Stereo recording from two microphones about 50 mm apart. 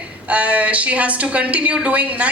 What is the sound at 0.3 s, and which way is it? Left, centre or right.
A man's voice, right.